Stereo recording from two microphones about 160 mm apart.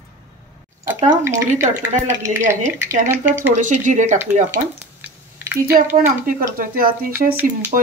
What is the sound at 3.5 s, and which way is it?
Speech, 50° right (ahead or behind).